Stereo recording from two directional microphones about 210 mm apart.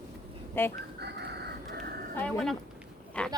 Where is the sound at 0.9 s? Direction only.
50° right (ahead or behind).